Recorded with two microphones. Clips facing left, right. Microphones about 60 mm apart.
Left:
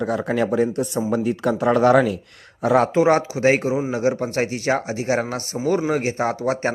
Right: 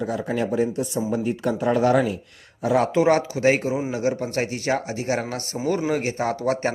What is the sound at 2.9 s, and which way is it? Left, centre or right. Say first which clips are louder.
Speech: left 2 dB; left.